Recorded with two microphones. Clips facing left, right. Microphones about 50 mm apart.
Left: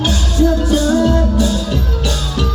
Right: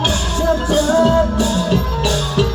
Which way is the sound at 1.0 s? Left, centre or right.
Right.